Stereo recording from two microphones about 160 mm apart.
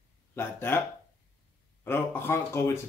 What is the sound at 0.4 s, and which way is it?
Speech, 15° left (ahead or behind).